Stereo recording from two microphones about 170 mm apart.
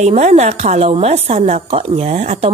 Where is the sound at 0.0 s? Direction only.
40° right (ahead or behind).